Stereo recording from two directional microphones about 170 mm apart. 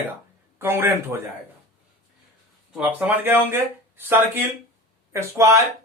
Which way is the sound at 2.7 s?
10° right (ahead or behind).